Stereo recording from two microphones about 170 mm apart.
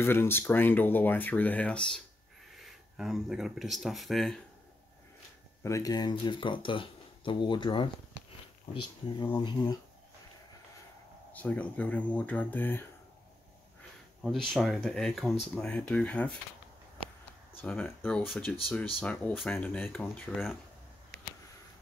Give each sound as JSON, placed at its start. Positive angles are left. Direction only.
{"t": 0.0, "sound": "speech", "side_deg": 15}
{"t": 5.6, "sound": "speech", "side_deg": 20}
{"t": 9.4, "sound": "speech", "side_deg": 25}
{"t": 11.3, "sound": "speech", "side_deg": 10}
{"t": 14.2, "sound": "speech", "side_deg": 0}
{"t": 17.6, "sound": "speech", "side_deg": 10}